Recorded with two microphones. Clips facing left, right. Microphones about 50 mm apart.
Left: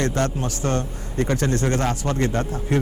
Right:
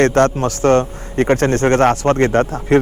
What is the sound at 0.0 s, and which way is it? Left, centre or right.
A man's voice, right.